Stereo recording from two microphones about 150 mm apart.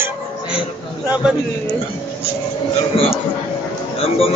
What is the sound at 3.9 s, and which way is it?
Speech, 45° left (ahead or behind).